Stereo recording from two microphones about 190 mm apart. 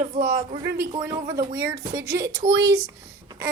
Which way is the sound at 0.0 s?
40° right (ahead or behind).